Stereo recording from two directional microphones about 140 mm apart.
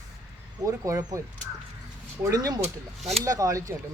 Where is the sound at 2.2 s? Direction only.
25° right (ahead or behind).